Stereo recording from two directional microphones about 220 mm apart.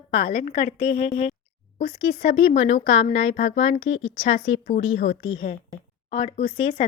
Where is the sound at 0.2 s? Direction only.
45° left (ahead or behind).